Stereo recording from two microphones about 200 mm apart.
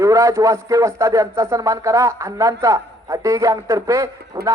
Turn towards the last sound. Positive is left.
turn(degrees=-15)  # may be behind; listen again after turning